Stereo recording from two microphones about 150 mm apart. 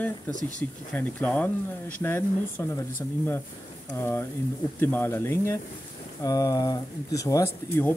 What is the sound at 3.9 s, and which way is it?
Speech, 15° left (ahead or behind).